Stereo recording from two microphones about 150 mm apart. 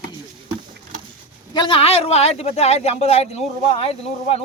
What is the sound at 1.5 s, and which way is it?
Speech, 35° left (ahead or behind).